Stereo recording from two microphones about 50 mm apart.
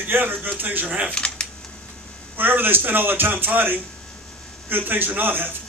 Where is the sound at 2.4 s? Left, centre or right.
Right.